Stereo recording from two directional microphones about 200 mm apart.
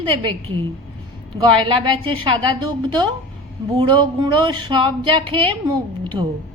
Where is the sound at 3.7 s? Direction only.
25° right (ahead or behind).